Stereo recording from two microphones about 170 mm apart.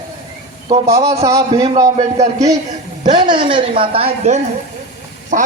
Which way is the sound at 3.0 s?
30° right (ahead or behind).